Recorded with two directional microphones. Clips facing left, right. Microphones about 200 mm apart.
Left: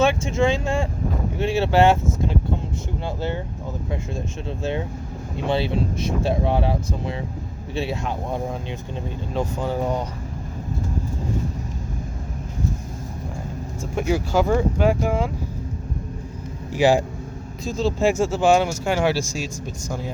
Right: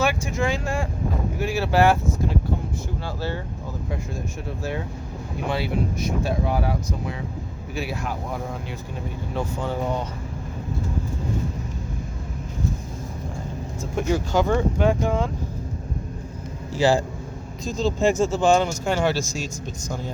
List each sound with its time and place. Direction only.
0.0 s speech: 25° left (ahead or behind)
3.0 s speech: 20° left (ahead or behind)
14.0 s speech: 10° left (ahead or behind)
16.7 s speech: 15° left (ahead or behind)